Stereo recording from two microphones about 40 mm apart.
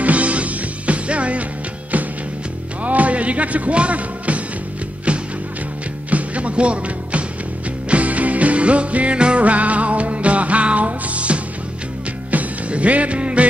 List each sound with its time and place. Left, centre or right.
0.0 s music: right
2.8 s music: right